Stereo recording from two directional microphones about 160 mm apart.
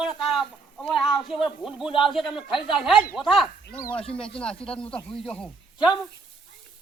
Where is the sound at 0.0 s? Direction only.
Centre (ahead or behind).